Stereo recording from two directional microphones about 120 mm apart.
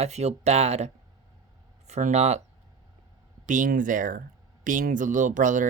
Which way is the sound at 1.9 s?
70° right (ahead or behind).